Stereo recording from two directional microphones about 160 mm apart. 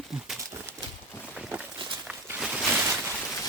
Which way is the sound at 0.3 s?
15° right (ahead or behind).